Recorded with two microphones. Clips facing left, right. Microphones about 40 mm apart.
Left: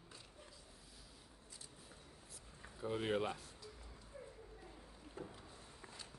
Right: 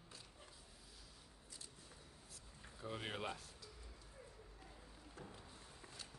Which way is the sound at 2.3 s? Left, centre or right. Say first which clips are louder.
Left 3 dB; centre.